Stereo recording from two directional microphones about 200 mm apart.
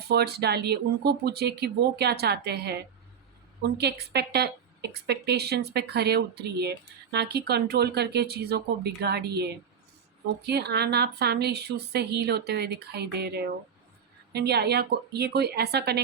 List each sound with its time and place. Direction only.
0.1 s a woman's voice: 55° right (ahead or behind)